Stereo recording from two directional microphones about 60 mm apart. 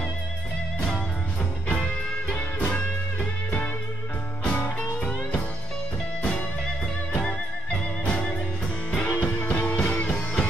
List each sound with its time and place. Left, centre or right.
1.7 s music: left
7.1 s music: centre